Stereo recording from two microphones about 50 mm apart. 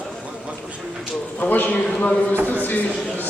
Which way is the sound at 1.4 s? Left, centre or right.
Left.